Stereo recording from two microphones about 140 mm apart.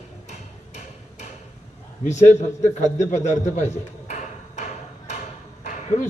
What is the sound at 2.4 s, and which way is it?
Speech, 55° left (ahead or behind).